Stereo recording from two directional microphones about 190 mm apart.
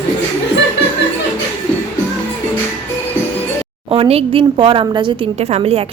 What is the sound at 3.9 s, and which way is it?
A woman's voice, 30° right (ahead or behind).